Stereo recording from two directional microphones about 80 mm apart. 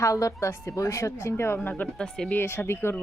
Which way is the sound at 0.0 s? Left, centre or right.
Left.